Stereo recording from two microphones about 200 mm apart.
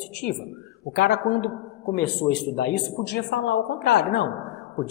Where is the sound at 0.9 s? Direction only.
60° left (ahead or behind).